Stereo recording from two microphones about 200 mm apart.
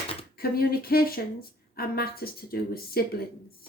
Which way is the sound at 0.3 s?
50° left (ahead or behind).